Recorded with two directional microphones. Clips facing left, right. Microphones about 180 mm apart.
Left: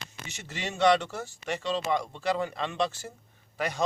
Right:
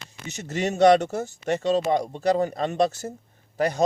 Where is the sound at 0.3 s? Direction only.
40° right (ahead or behind).